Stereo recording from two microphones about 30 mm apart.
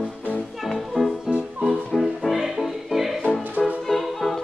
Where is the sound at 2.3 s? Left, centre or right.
Centre.